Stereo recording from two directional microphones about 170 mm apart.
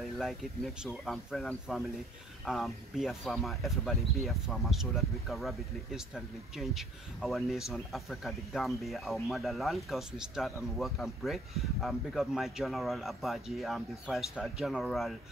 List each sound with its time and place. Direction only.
0.2 s speech: centre (ahead or behind)